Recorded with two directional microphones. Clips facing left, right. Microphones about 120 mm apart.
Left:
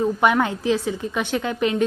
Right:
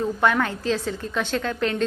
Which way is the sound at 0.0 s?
15° left (ahead or behind).